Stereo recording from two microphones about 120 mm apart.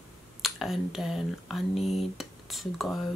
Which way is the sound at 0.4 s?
Centre (ahead or behind).